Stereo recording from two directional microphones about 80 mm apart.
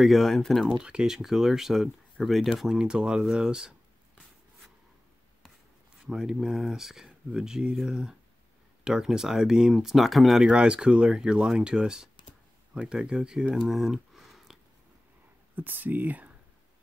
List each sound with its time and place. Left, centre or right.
0.0 s speech: centre
0.7 s speech: centre
6.0 s speech: centre
10.4 s speech: centre
15.5 s speech: right